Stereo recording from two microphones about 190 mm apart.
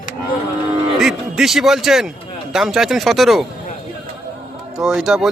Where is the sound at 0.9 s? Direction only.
Centre (ahead or behind).